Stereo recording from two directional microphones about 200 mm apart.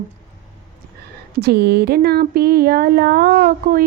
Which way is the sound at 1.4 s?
55° right (ahead or behind).